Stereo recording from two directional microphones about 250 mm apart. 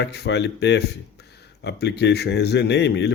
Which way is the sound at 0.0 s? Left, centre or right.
Left.